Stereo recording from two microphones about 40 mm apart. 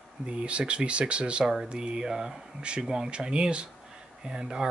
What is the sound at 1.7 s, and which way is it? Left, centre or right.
Speech, right.